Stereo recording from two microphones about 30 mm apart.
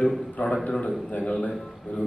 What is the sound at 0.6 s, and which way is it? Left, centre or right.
Speech, left.